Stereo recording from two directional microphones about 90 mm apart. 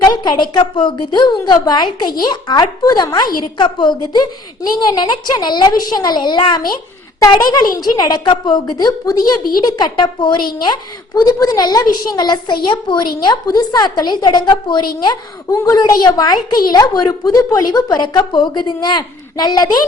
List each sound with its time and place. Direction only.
0.0 s a sound: 50° left (ahead or behind)
0.8 s a woman's voice: 60° left (ahead or behind)
7.3 s a woman's voice: 45° left (ahead or behind)
15.4 s a woman's voice: 40° left (ahead or behind)